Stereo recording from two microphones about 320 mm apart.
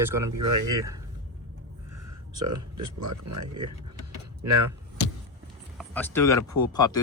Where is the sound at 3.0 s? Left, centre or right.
Right.